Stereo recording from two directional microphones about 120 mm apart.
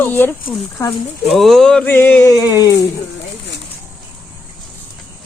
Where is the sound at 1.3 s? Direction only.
Centre (ahead or behind).